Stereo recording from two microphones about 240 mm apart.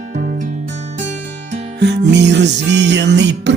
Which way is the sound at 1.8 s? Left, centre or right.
Right.